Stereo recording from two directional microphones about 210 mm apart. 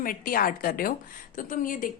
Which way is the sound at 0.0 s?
40° left (ahead or behind).